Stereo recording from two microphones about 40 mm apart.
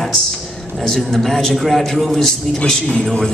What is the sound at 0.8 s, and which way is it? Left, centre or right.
A man's voice, centre.